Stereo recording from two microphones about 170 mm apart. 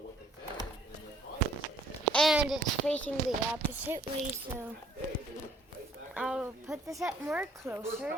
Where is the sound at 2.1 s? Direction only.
Centre (ahead or behind).